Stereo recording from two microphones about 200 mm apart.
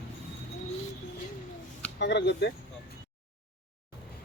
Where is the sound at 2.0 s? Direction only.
60° left (ahead or behind).